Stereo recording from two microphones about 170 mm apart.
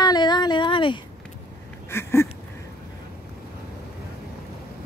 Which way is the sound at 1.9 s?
15° left (ahead or behind).